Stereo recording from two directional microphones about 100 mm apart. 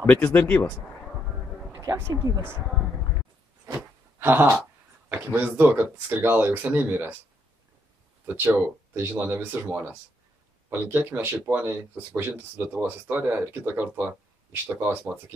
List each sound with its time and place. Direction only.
0.0 s speech: 20° left (ahead or behind)
1.7 s speech: 35° right (ahead or behind)
4.2 s a sound: 20° right (ahead or behind)
5.1 s speech: 15° right (ahead or behind)
8.3 s speech: 20° right (ahead or behind)